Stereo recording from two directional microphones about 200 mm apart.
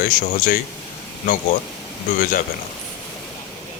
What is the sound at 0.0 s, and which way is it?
Speech, 45° left (ahead or behind).